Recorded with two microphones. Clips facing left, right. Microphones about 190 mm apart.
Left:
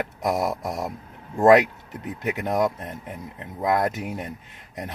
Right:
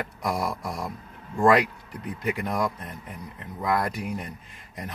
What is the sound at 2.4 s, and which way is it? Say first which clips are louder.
Speech: left 4 dB; 20° left (ahead or behind).